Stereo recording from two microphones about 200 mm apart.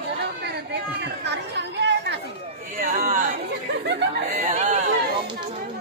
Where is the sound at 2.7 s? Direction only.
40° right (ahead or behind).